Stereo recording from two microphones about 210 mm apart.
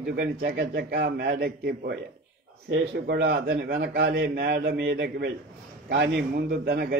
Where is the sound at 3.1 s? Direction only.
50° right (ahead or behind).